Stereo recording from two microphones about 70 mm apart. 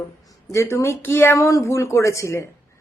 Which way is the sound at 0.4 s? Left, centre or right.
Left.